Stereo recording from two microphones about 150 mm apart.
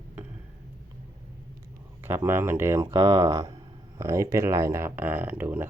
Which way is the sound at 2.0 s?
15° right (ahead or behind).